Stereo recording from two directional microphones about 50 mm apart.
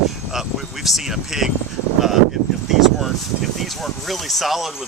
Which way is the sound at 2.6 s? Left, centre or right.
Centre.